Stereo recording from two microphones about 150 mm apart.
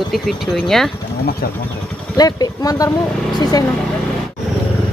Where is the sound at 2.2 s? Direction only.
25° left (ahead or behind).